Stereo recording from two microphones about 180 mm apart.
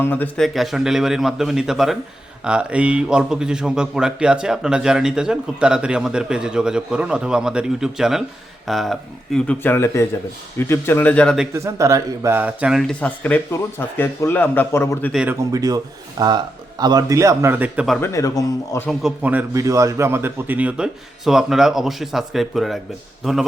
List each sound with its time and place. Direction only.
0.0 s speech: 10° left (ahead or behind)
11.5 s speech: 15° right (ahead or behind); by 15.1 s 15° left (ahead or behind)
15.1 s speech: 5° right (ahead or behind)
15.4 s speech: 20° right (ahead or behind)
18.0 s speech: 15° left (ahead or behind)
18.9 s speech: 5° right (ahead or behind)